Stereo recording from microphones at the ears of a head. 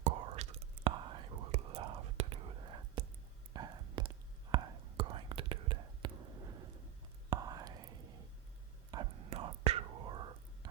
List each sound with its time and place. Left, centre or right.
0.0 s whispering: right